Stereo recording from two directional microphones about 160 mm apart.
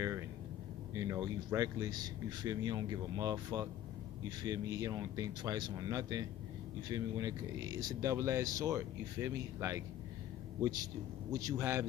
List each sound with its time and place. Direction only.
0.9 s a man's voice: 20° right (ahead or behind)